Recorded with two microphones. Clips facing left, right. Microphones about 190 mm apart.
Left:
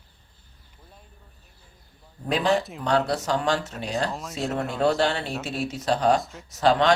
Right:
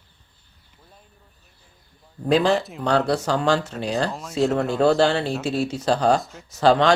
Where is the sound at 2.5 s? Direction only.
Centre (ahead or behind).